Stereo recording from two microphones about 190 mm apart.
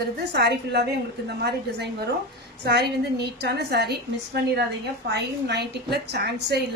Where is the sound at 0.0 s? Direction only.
60° right (ahead or behind).